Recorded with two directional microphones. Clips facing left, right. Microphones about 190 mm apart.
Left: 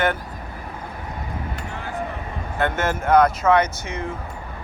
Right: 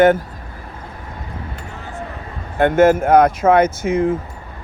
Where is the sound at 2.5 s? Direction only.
50° right (ahead or behind).